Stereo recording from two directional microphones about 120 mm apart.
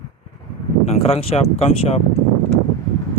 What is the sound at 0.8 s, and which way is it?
Speech, 60° left (ahead or behind).